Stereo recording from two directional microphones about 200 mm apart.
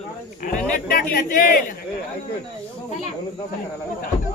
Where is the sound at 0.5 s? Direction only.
45° left (ahead or behind).